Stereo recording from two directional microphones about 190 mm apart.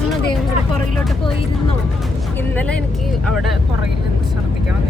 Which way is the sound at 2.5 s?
5° left (ahead or behind).